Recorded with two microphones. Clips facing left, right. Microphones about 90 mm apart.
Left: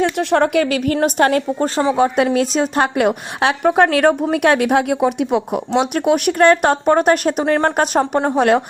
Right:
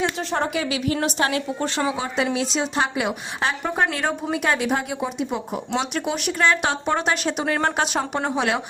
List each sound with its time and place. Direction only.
0.0 s a woman's voice: 65° left (ahead or behind); by 2.0 s 35° left (ahead or behind)
2.0 s a woman's voice: 50° left (ahead or behind)